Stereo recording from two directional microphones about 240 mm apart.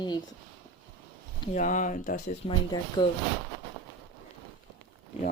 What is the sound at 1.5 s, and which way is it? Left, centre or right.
Speech, left.